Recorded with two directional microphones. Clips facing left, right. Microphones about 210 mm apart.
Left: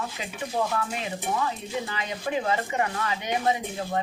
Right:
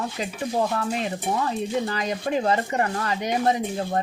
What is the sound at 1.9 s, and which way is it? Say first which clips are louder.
Speech: right 4 dB; 40° right (ahead or behind).